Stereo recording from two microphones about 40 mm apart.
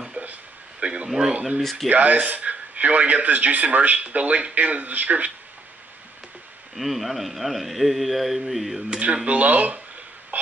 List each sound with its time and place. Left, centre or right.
0.2 s a sound: right
0.7 s speech: right
1.6 s speech: centre
1.9 s a man's voice: right
6.7 s speech: centre
9.0 s a man's voice: right
10.3 s wheeze: right